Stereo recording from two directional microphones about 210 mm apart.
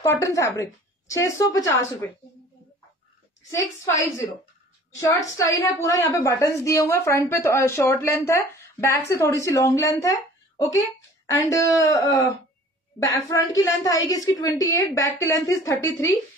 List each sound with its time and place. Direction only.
0.0 s a woman's voice: 15° left (ahead or behind)
3.5 s a woman's voice: 15° left (ahead or behind)